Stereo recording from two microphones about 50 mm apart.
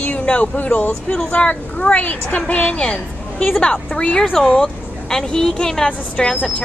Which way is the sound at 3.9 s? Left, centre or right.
Centre.